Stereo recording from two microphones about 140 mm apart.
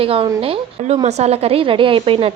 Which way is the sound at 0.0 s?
40° right (ahead or behind).